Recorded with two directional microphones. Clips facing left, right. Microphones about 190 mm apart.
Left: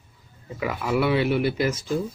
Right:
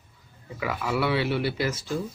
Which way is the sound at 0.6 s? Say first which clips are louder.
Left 3 dB; 20° left (ahead or behind).